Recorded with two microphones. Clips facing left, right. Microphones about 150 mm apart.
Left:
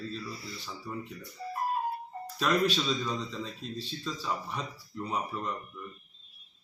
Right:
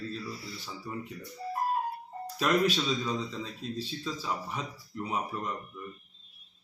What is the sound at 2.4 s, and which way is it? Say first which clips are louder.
Speech: right 1 dB; 5° right (ahead or behind).